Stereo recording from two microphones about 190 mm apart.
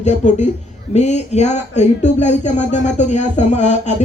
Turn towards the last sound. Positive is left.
turn(degrees=40)  # may be behind; listen again after turning